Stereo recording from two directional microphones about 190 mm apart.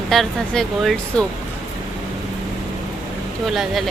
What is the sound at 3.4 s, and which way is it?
Speech, centre (ahead or behind).